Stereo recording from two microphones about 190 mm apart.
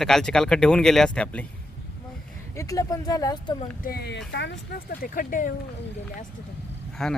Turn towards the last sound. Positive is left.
turn(degrees=0)  # may be behind; listen again after turning